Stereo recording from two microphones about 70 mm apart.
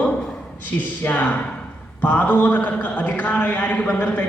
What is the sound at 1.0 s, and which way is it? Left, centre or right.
A man's voice, left.